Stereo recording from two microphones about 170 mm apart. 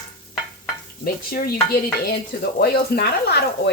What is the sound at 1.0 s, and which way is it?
Stir, 65° left (ahead or behind).